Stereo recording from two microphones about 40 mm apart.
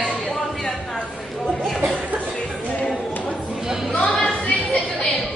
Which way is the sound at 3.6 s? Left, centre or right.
Centre.